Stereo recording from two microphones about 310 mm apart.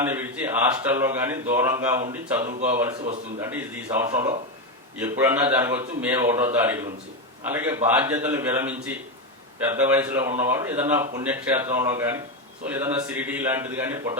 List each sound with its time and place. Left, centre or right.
0.0 s speech: centre
2.4 s speech: right
3.4 s speech: centre